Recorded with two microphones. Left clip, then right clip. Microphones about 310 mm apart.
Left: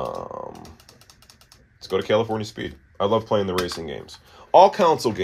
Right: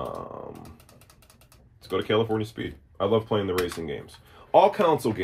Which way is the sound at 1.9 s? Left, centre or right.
Left.